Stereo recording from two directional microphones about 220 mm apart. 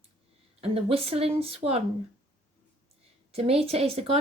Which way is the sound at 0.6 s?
25° right (ahead or behind).